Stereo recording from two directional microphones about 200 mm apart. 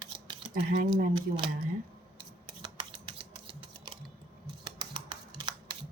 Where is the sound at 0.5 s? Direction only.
40° right (ahead or behind).